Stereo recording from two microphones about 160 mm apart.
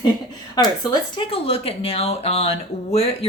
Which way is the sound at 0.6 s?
25° left (ahead or behind).